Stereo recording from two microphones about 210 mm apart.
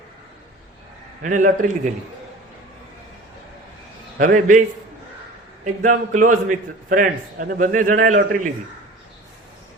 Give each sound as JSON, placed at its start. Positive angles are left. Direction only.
{"t": 1.2, "sound": "a man's voice", "side_deg": -40}
{"t": 4.2, "sound": "a man's voice", "side_deg": -40}
{"t": 5.8, "sound": "a man's voice", "side_deg": -40}